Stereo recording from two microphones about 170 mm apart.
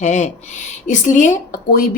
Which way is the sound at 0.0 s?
45° left (ahead or behind).